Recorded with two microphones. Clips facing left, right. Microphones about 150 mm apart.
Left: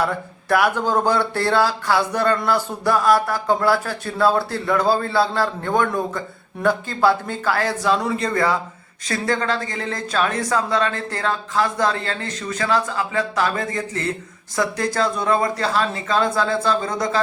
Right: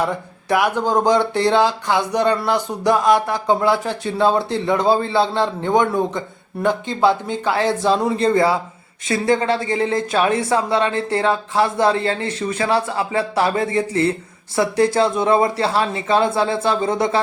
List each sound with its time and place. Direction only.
0.0 s speech: 15° right (ahead or behind)